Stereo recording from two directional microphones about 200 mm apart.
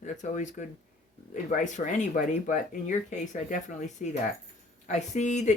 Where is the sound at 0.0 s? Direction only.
40° left (ahead or behind).